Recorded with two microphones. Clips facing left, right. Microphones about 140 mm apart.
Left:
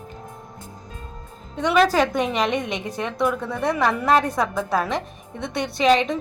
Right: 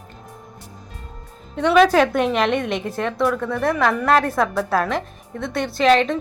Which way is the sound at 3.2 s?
15° left (ahead or behind).